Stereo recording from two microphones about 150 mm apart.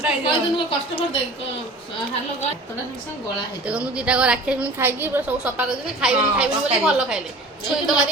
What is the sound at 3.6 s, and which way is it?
A woman's voice, 10° right (ahead or behind).